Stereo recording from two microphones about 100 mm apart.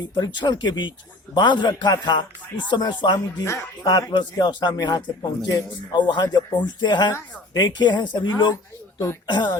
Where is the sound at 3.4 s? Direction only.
30° left (ahead or behind); by 8.5 s 50° left (ahead or behind).